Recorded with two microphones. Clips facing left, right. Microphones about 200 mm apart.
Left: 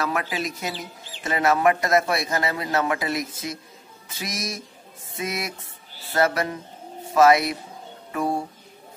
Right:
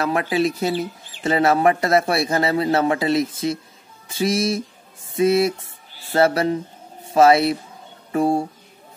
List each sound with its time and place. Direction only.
0.0 s a man's voice: 30° right (ahead or behind)